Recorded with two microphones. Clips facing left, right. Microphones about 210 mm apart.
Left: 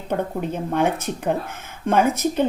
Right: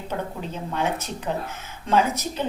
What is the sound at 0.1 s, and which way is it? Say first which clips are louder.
A woman's voice: left 7 dB; 55° left (ahead or behind).